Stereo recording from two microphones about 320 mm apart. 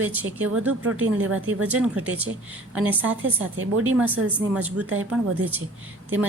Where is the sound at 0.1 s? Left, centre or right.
Centre.